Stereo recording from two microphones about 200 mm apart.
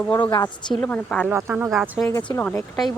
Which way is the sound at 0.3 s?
20° left (ahead or behind).